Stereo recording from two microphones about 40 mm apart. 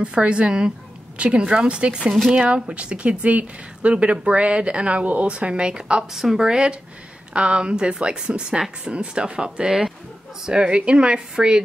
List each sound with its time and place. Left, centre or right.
0.0 s a woman's voice: right
2.5 s speech: right
9.7 s speech: centre
10.4 s speech: right